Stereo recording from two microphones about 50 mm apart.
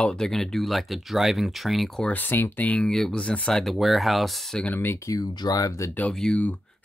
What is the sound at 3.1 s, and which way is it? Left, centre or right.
Speech, left.